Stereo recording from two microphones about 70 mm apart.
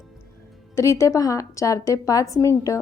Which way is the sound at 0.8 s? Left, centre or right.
Left.